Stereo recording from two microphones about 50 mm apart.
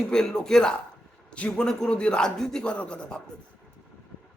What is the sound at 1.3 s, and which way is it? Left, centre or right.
Speech, left.